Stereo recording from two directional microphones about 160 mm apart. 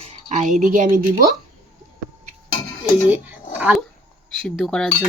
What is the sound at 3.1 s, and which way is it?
Speech, 10° right (ahead or behind).